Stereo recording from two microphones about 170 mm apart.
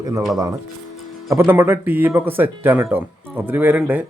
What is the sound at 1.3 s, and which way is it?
Speech, 15° right (ahead or behind).